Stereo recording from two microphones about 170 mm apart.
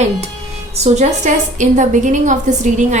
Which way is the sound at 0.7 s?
40° right (ahead or behind).